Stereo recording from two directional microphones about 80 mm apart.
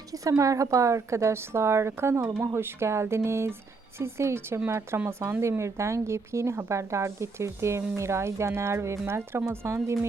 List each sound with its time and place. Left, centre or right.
0.1 s speech: right